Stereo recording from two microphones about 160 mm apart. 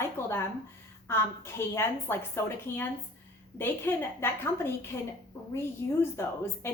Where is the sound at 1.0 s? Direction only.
15° left (ahead or behind).